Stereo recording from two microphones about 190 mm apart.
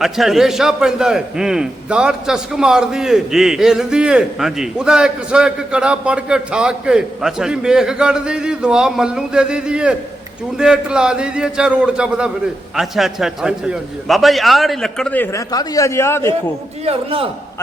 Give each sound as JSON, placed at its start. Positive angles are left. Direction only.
{"t": 0.0, "sound": "a man's voice", "side_deg": 0}
{"t": 16.8, "sound": "a man's voice", "side_deg": -30}